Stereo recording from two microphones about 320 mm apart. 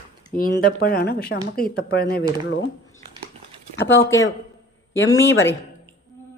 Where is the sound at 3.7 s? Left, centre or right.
Left.